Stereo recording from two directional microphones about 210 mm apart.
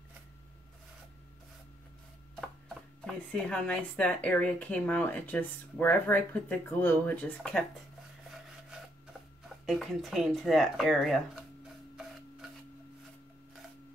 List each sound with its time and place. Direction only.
3.1 s a woman's voice: 5° left (ahead or behind)
9.7 s speech: centre (ahead or behind)